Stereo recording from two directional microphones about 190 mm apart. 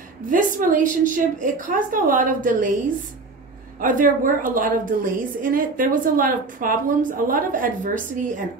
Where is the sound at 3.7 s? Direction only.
45° right (ahead or behind).